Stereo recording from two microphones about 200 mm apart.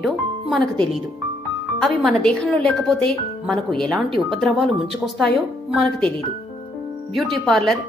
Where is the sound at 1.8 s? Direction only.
5° left (ahead or behind).